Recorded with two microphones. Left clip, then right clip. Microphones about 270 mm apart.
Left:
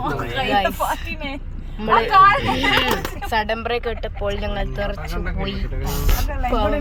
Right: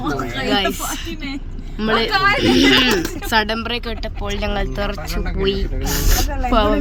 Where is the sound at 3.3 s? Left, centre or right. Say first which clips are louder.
Right 2 dB; centre.